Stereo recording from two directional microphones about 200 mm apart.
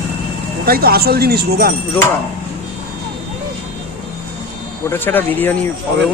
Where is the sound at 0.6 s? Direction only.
50° right (ahead or behind).